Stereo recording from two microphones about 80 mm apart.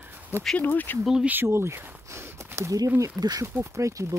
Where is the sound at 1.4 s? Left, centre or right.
Right.